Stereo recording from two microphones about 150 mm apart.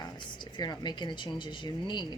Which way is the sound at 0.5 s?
30° left (ahead or behind).